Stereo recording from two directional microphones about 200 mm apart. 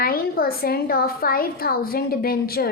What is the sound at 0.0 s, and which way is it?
A woman's voice, 45° left (ahead or behind).